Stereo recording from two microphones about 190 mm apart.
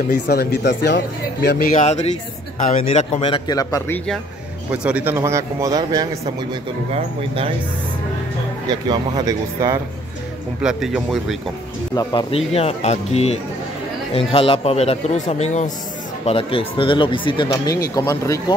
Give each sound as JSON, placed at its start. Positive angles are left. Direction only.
{"t": 0.1, "sound": "speech", "side_deg": 55}
{"t": 1.7, "sound": "speech", "side_deg": 40}
{"t": 4.6, "sound": "a man's voice", "side_deg": -5}
{"t": 6.9, "sound": "speech", "side_deg": -30}
{"t": 8.6, "sound": "speech", "side_deg": -25}
{"t": 10.6, "sound": "speech", "side_deg": -5}
{"t": 11.9, "sound": "speech", "side_deg": 20}